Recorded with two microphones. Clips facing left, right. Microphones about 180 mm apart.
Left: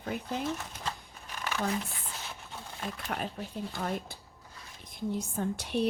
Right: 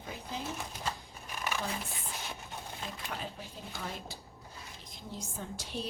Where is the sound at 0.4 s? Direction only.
10° right (ahead or behind).